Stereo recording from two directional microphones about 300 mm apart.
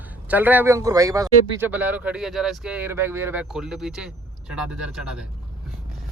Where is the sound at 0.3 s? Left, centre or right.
Centre.